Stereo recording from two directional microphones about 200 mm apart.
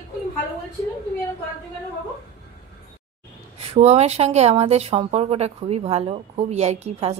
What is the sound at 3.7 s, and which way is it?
A woman's voice, 30° right (ahead or behind).